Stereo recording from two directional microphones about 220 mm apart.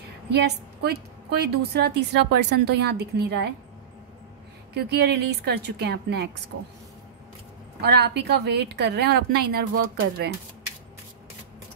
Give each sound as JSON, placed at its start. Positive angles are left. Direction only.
{"t": 0.3, "sound": "a woman's voice", "side_deg": -50}
{"t": 4.7, "sound": "a woman's voice", "side_deg": -50}
{"t": 6.5, "sound": "speech", "side_deg": -75}
{"t": 7.8, "sound": "a woman's voice", "side_deg": -45}